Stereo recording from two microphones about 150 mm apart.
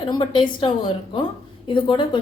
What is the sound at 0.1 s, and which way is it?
A woman's voice, 35° left (ahead or behind).